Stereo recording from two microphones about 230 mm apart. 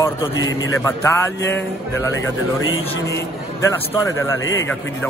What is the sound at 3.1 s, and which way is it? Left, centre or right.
A man's voice, centre.